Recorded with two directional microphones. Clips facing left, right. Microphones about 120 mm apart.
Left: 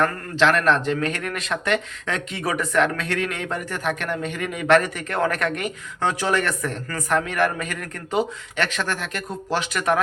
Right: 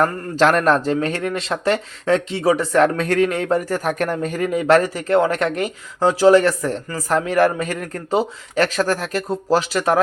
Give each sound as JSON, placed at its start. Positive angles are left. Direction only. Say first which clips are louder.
{"t": 0.0, "sound": "a man's voice", "louder": "right 3 dB", "side_deg": -40}